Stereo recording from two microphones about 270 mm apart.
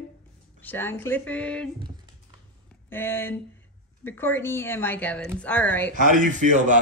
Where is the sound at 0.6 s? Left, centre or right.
Centre.